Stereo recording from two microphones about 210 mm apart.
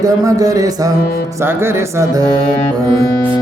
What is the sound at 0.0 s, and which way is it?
A man's voice, 15° right (ahead or behind).